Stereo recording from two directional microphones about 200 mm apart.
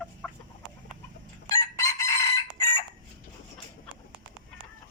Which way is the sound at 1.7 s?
15° left (ahead or behind).